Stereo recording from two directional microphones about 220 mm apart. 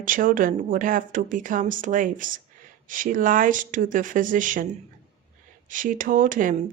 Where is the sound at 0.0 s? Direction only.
40° right (ahead or behind).